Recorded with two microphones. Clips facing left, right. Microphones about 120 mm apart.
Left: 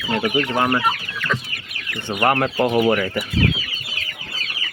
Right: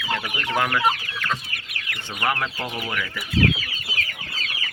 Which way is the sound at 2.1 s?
50° left (ahead or behind).